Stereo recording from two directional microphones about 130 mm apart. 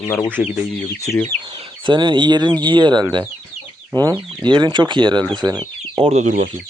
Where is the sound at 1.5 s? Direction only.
45° right (ahead or behind).